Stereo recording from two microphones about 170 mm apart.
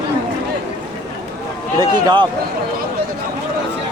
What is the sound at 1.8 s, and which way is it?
Speech, 25° right (ahead or behind).